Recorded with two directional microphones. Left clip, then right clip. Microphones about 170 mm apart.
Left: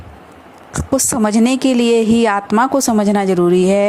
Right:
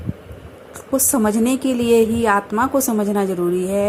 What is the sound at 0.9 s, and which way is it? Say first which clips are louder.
A woman's voice: left 3 dB; 40° left (ahead or behind).